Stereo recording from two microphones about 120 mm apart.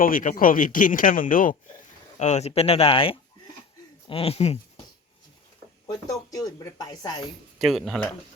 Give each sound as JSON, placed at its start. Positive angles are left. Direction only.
{"t": 0.2, "sound": "speech", "side_deg": 90}
{"t": 2.1, "sound": "speech", "side_deg": 70}
{"t": 5.9, "sound": "speech", "side_deg": 30}
{"t": 7.6, "sound": "speech", "side_deg": 0}